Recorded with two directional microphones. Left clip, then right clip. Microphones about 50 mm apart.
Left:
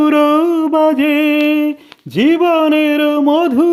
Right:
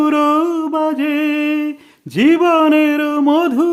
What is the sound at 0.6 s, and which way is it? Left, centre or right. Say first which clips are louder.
Music: left 5 dB; left.